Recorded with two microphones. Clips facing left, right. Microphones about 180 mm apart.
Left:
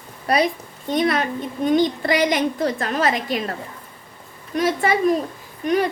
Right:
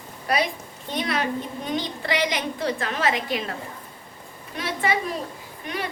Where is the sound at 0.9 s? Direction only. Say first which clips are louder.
Left 5 dB; 45° left (ahead or behind).